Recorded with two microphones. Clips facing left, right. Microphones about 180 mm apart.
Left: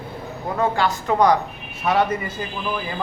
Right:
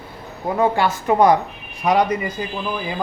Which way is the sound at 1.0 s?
20° right (ahead or behind).